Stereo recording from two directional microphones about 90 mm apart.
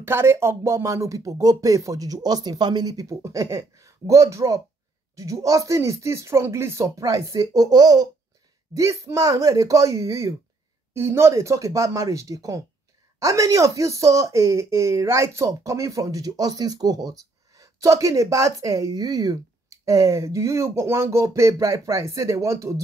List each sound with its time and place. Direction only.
0.0 s speech: 25° right (ahead or behind); by 3.2 s 45° right (ahead or behind)
3.2 s speech: 35° right (ahead or behind)
8.7 s speech: 35° right (ahead or behind)